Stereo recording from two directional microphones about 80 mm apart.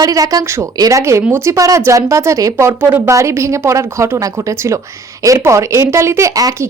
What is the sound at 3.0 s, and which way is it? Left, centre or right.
Speech, right.